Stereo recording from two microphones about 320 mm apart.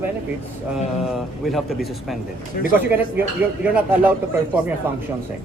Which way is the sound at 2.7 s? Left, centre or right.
Centre.